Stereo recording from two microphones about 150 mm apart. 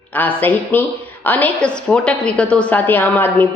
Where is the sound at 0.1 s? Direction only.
10° left (ahead or behind).